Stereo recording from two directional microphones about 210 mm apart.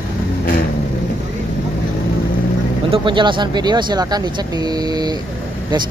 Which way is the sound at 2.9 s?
25° right (ahead or behind).